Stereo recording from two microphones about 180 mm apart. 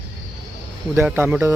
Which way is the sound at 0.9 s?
10° right (ahead or behind).